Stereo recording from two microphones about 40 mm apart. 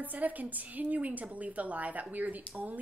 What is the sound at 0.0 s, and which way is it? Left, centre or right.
A woman's voice, right.